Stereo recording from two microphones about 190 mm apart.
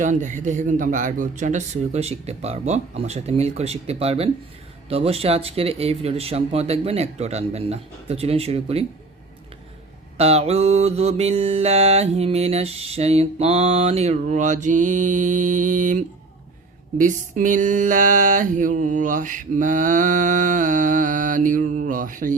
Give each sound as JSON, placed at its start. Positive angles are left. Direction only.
{"t": 0.0, "sound": "mantra", "side_deg": -40}
{"t": 10.2, "sound": "mantra", "side_deg": -35}